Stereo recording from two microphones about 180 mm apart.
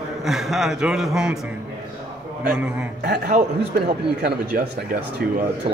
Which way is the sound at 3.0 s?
65° right (ahead or behind).